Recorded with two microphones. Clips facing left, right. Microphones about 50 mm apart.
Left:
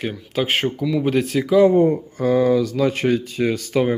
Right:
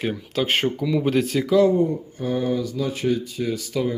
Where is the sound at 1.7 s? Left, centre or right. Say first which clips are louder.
Left 5 dB; left.